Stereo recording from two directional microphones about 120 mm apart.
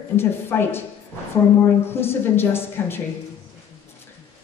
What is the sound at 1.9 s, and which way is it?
A woman's voice, 20° left (ahead or behind).